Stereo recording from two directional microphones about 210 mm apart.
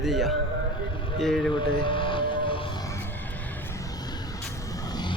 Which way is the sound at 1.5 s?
20° left (ahead or behind).